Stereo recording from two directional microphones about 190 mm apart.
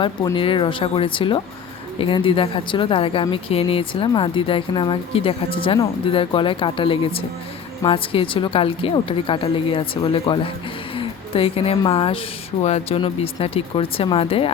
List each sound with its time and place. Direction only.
0.0 s speech: 25° left (ahead or behind)